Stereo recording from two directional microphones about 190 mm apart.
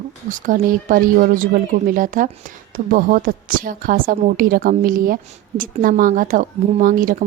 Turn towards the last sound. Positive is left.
turn(degrees=-45)  # may be behind; listen again after turning